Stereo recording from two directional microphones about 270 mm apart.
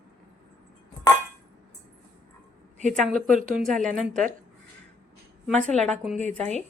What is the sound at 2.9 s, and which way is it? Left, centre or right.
Speech, centre.